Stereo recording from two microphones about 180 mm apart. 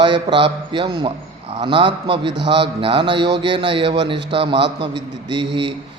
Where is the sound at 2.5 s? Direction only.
30° right (ahead or behind).